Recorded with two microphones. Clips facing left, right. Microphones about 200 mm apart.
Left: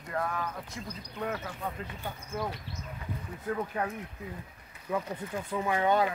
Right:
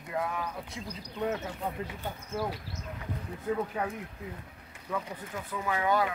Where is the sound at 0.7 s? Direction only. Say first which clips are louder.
Right 1 dB; 25° right (ahead or behind).